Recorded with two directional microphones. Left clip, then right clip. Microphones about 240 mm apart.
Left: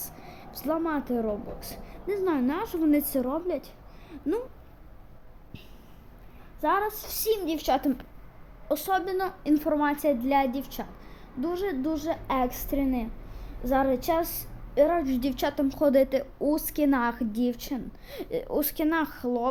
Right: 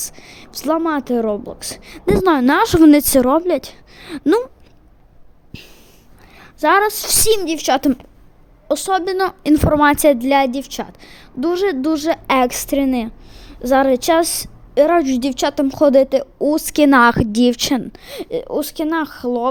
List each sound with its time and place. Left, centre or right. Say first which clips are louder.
0.0 s a woman's voice: right 11 dB; right
6.4 s a woman's voice: right 12 dB; right